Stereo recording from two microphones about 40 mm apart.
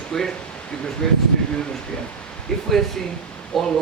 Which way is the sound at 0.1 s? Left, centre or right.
Centre.